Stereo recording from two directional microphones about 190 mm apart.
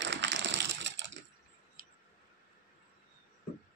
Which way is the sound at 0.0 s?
70° right (ahead or behind).